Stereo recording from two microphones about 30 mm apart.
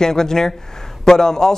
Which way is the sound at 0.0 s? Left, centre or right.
Centre.